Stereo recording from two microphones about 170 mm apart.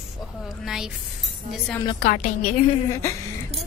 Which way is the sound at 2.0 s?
55° left (ahead or behind).